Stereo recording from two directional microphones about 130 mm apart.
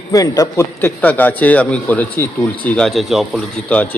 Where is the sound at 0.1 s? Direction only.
25° left (ahead or behind); by 3.4 s centre (ahead or behind).